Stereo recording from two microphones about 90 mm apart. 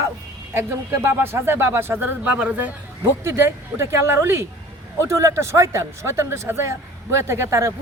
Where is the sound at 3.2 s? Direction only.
30° right (ahead or behind).